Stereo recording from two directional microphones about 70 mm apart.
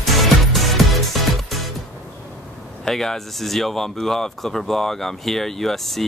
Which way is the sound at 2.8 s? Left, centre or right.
Centre.